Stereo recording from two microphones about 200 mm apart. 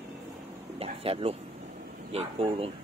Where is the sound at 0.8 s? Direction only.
30° right (ahead or behind).